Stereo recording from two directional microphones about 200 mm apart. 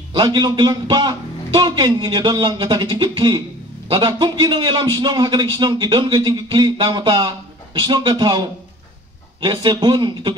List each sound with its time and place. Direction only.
0.1 s a man's voice: 20° right (ahead or behind)